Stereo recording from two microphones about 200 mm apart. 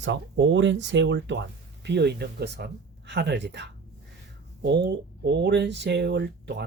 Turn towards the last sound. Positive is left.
turn(degrees=-60)  # may be behind; listen again after turning